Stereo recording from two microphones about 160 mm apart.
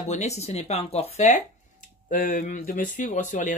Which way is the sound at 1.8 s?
55° left (ahead or behind).